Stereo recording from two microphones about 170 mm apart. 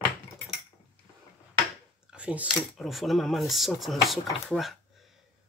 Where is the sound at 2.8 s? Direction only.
Centre (ahead or behind).